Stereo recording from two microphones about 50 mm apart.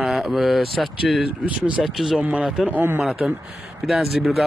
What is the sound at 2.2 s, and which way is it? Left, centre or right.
Speech, right.